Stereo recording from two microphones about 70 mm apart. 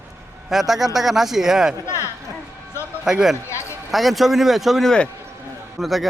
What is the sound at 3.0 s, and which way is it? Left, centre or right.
A man's voice, centre.